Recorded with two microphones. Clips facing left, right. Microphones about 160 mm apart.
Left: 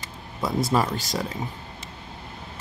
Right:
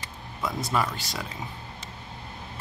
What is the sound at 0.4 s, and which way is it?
Speech, 35° left (ahead or behind).